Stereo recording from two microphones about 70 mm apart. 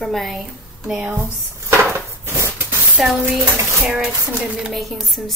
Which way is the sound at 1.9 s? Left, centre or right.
Right.